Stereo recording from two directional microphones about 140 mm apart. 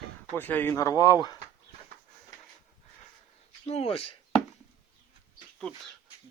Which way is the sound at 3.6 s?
45° left (ahead or behind).